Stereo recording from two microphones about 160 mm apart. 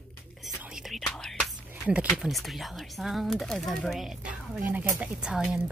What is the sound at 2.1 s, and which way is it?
A woman's voice, centre (ahead or behind).